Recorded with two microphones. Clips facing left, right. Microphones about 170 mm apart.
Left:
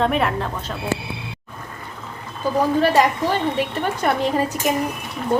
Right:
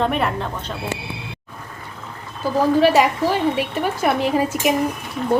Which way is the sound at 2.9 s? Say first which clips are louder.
Right 1 dB; 10° right (ahead or behind).